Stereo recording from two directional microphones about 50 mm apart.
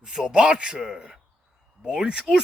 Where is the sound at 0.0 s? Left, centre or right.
Centre.